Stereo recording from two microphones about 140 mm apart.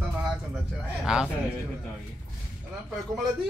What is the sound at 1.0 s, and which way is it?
Speech, 5° right (ahead or behind).